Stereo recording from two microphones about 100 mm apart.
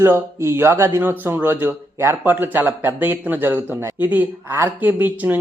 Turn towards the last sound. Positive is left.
turn(degrees=-20)  # may be behind; listen again after turning